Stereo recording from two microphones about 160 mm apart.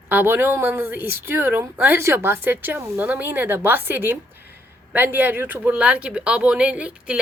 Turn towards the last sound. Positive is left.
turn(degrees=-5)  # may be behind; listen again after turning